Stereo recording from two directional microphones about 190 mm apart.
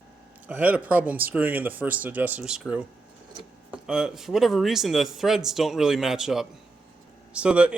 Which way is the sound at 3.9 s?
5° right (ahead or behind).